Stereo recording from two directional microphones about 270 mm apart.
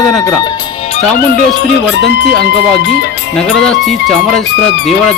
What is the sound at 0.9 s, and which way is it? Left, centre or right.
Speech, left.